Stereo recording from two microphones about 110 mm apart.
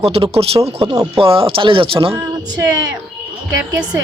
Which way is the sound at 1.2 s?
55° right (ahead or behind).